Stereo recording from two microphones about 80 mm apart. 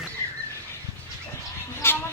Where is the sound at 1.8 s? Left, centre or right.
Left.